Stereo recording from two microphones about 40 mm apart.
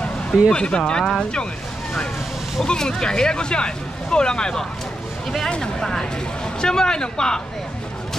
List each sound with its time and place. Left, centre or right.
0.5 s speech: left
2.6 s speech: centre
5.8 s a man's voice: centre